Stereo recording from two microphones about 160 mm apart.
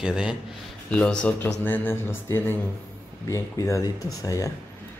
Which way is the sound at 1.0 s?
5° left (ahead or behind).